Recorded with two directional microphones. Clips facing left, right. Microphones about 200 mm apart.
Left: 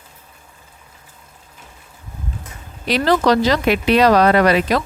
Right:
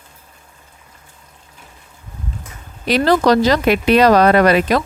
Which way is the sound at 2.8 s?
45° right (ahead or behind).